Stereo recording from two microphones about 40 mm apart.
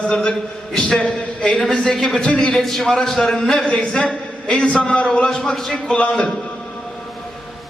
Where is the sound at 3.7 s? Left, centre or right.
Left.